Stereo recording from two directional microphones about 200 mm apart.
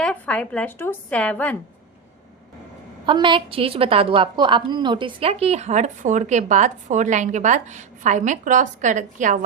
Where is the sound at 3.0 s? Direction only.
25° right (ahead or behind).